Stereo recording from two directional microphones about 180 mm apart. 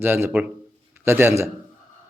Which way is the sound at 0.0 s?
10° right (ahead or behind).